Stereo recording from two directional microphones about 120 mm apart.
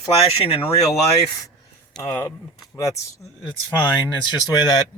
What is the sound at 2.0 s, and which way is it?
Speech, 20° left (ahead or behind).